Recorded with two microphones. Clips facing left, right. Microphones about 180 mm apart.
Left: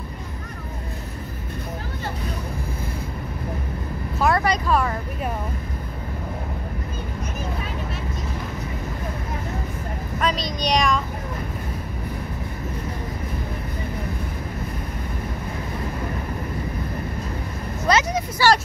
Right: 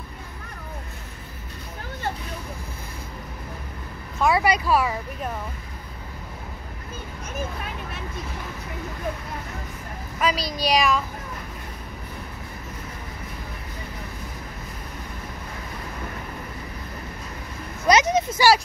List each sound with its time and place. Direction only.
4.4 s a sound: 10° right (ahead or behind)
10.2 s child singing: 5° right (ahead or behind)
17.8 s vehicle: 20° right (ahead or behind)